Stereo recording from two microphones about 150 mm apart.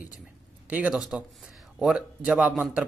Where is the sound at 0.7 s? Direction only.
10° right (ahead or behind).